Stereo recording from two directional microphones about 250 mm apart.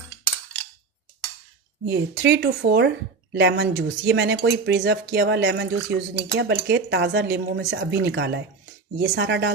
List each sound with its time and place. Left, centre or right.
1.9 s speech: right